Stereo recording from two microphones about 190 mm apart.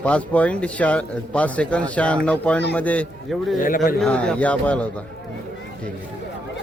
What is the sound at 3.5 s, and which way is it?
Speech, 45° left (ahead or behind).